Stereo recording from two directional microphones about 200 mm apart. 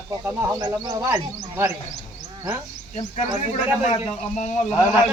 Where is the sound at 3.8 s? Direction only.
35° left (ahead or behind).